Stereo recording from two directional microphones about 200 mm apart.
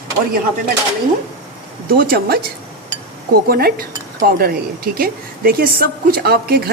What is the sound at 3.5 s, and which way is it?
Speech, 50° right (ahead or behind).